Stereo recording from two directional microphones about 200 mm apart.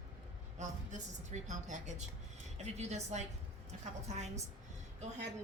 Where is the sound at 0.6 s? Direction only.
35° right (ahead or behind).